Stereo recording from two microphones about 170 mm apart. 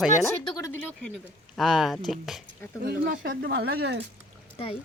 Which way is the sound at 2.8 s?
60° right (ahead or behind).